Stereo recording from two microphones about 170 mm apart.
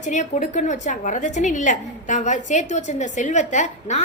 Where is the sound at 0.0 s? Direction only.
45° left (ahead or behind).